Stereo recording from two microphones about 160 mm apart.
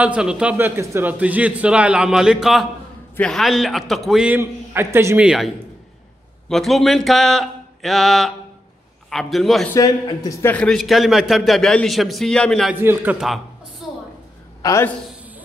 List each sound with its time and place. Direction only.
0.0 s a man's voice: 5° right (ahead or behind)
4.4 s a man's voice: 15° right (ahead or behind)
6.5 s a man's voice: centre (ahead or behind)
9.7 s speech: 20° left (ahead or behind)
10.5 s a man's voice: 5° left (ahead or behind)
12.8 s a man's voice: 10° right (ahead or behind)
14.6 s a man's voice: 20° left (ahead or behind)